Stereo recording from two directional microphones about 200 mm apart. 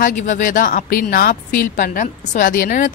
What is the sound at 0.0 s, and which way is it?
A woman's voice, 40° left (ahead or behind).